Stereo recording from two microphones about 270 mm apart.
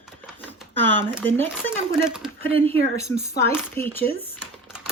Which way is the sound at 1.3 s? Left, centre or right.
Centre.